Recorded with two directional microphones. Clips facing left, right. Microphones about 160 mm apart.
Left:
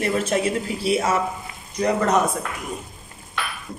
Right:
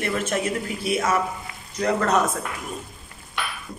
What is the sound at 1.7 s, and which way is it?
Speech, 15° left (ahead or behind).